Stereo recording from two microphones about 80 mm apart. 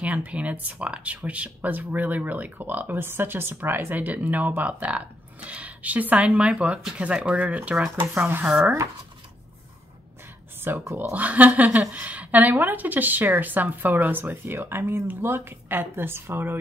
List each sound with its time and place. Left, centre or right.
0.0 s speech: centre
8.5 s speech: centre
10.7 s speech: right